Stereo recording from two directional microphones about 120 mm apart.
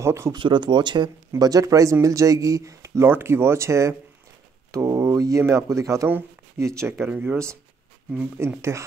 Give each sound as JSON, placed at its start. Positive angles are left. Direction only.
{"t": 0.0, "sound": "speech", "side_deg": -20}
{"t": 0.3, "sound": "speech", "side_deg": -40}
{"t": 8.5, "sound": "speech", "side_deg": -25}